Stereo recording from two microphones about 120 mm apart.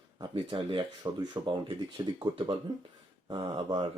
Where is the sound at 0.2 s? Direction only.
40° right (ahead or behind).